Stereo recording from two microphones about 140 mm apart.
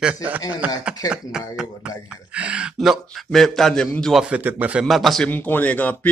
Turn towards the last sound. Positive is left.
turn(degrees=10)  # may be behind; listen again after turning